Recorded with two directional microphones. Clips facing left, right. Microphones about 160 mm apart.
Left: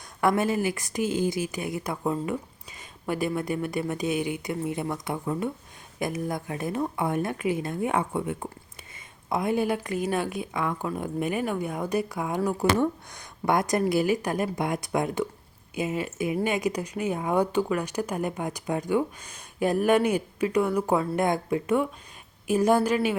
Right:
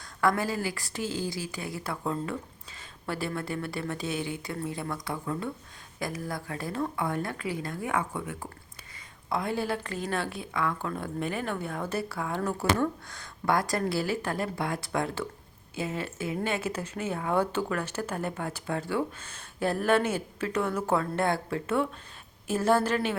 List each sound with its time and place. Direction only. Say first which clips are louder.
0.0 s speech: left 3 dB; 20° left (ahead or behind)